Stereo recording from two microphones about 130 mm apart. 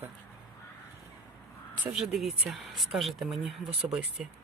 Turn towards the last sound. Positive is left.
turn(degrees=-5)  # may be behind; listen again after turning